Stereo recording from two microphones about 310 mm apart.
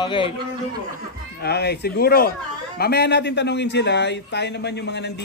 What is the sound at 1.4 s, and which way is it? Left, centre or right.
Speech, left.